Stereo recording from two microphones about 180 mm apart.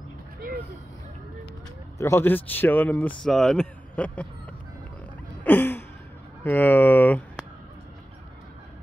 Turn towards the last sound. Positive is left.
turn(degrees=10)  # may be behind; listen again after turning